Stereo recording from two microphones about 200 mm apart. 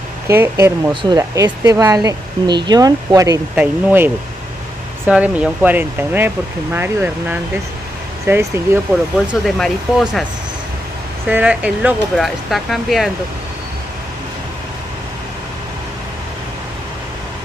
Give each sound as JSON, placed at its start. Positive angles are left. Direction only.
{"t": 0.3, "sound": "speech", "side_deg": -10}
{"t": 9.3, "sound": "speech", "side_deg": 0}
{"t": 11.2, "sound": "speech", "side_deg": -5}